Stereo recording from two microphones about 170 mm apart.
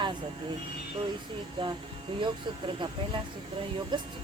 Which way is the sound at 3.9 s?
25° right (ahead or behind).